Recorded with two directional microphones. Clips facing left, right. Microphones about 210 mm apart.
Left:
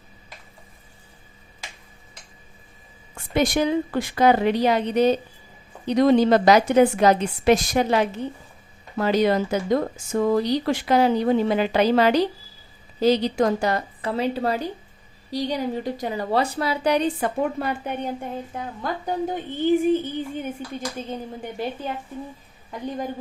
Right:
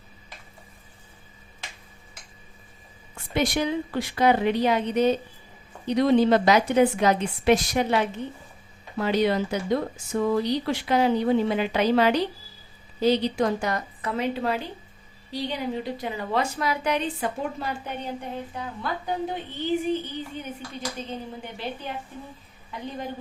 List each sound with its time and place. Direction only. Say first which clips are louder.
3.3 s speech: left 4 dB; 45° left (ahead or behind)
17.6 s a woman's voice: left 5 dB; 50° left (ahead or behind)
22.7 s a woman's voice: left 4 dB; 45° left (ahead or behind)